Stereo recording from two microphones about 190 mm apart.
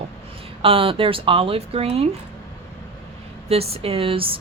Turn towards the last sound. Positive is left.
turn(degrees=-30)  # may be behind; listen again after turning